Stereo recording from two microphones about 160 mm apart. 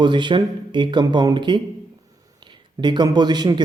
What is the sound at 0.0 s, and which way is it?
A man's voice, 30° right (ahead or behind).